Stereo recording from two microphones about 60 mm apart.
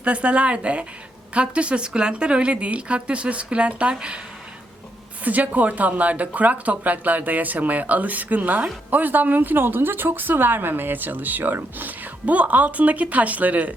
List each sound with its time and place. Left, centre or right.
0.0 s speech: centre
5.2 s a woman's voice: right